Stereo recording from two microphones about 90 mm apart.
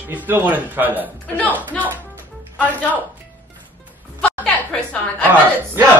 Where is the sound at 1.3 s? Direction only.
15° left (ahead or behind).